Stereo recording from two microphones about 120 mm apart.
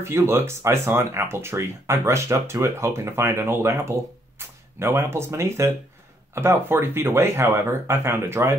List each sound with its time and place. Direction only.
0.0 s speech: 20° right (ahead or behind)